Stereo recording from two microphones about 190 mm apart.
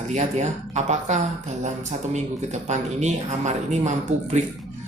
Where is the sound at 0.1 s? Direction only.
35° right (ahead or behind).